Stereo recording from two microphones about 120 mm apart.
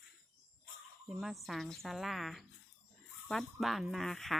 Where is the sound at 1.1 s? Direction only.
5° right (ahead or behind).